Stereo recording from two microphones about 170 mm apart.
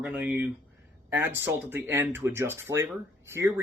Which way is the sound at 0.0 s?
10° right (ahead or behind).